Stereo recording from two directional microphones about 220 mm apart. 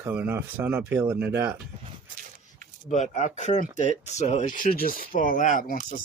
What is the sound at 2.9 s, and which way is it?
Speech, 30° left (ahead or behind).